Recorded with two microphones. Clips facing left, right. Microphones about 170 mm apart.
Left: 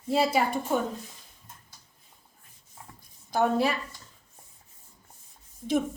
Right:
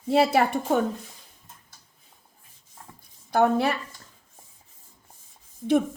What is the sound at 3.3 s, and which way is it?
Speech, 60° right (ahead or behind).